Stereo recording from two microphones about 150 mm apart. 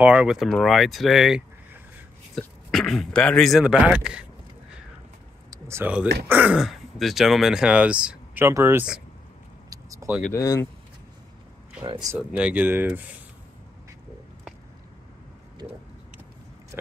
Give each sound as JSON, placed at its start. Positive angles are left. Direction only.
{"t": 0.0, "sound": "speech", "side_deg": -5}
{"t": 5.5, "sound": "speech", "side_deg": -15}
{"t": 8.5, "sound": "speech", "side_deg": -20}
{"t": 9.7, "sound": "vehicle", "side_deg": -20}
{"t": 10.3, "sound": "speech", "side_deg": 20}
{"t": 11.8, "sound": "speech", "side_deg": -35}
{"t": 12.2, "sound": "speech", "side_deg": -10}